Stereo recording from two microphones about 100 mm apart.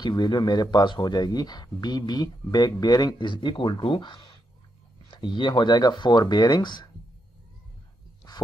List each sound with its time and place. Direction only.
0.0 s speech: 45° left (ahead or behind)